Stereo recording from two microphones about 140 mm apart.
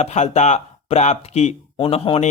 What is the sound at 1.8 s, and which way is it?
Speech, 40° left (ahead or behind).